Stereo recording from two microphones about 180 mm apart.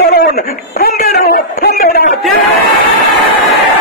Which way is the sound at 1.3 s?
55° left (ahead or behind).